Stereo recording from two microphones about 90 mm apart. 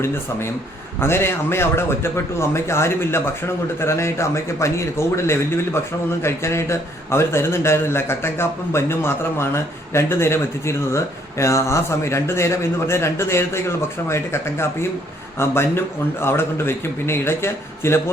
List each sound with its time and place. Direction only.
0.0 s speech: 30° left (ahead or behind)